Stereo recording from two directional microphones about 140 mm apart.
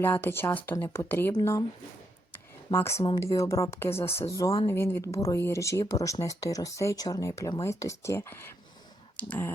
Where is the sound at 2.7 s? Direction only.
20° left (ahead or behind).